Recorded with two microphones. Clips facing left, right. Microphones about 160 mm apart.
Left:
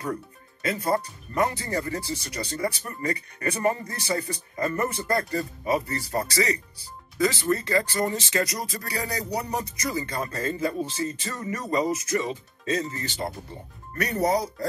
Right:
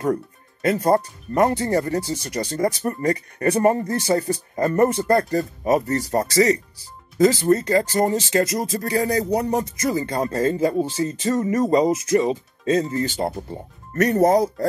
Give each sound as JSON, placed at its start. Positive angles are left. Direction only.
{"t": 0.0, "sound": "speech", "side_deg": -50}
{"t": 10.0, "sound": "speech", "side_deg": -25}
{"t": 10.3, "sound": "speech", "side_deg": -35}
{"t": 12.1, "sound": "speech", "side_deg": -35}
{"t": 14.0, "sound": "speech", "side_deg": -50}